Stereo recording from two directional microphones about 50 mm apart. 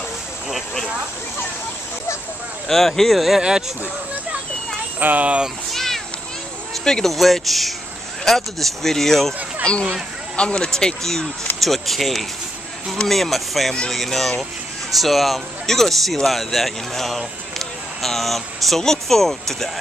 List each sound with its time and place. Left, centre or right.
2.7 s speech: centre
5.0 s speech: right
5.7 s children playing: centre
6.7 s speech: centre
9.7 s speech: left